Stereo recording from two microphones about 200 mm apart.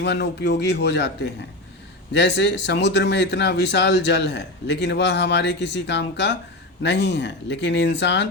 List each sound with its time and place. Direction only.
0.0 s speech: 60° left (ahead or behind)